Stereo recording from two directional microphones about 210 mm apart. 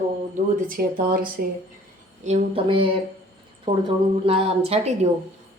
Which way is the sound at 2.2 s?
30° right (ahead or behind).